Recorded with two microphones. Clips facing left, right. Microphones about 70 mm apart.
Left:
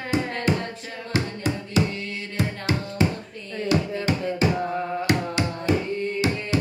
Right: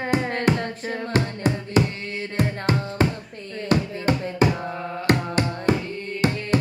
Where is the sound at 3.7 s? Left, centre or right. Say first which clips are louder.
Right 2 dB; right.